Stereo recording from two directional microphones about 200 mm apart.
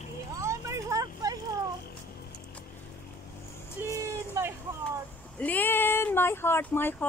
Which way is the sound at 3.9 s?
15° right (ahead or behind).